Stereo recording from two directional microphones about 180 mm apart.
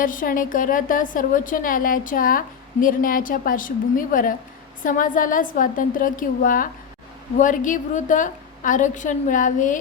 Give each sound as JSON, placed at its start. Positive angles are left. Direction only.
{"t": 0.0, "sound": "a woman's voice", "side_deg": 50}